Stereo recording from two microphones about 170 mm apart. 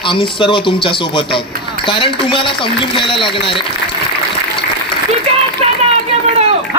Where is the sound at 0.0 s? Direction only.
30° left (ahead or behind).